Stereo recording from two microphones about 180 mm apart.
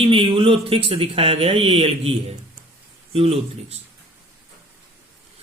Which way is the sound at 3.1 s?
35° right (ahead or behind).